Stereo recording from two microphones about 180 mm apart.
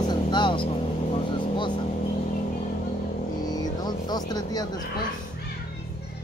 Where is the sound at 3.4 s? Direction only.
20° left (ahead or behind).